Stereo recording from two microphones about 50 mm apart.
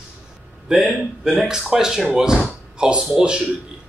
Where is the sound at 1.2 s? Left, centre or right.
Centre.